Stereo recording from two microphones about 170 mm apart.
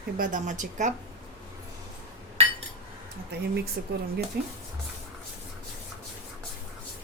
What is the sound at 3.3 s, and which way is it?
Speech, 70° right (ahead or behind).